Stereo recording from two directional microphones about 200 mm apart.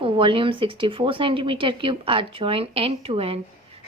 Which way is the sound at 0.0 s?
25° right (ahead or behind).